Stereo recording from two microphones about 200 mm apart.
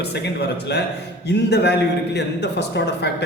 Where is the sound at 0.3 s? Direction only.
55° left (ahead or behind).